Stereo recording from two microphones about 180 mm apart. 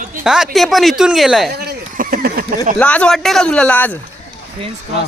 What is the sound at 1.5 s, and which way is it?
Speech, 60° right (ahead or behind).